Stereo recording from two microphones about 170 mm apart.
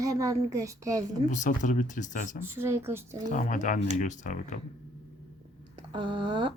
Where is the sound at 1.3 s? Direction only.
45° left (ahead or behind).